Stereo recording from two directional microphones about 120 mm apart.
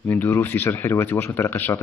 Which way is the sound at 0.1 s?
15° left (ahead or behind).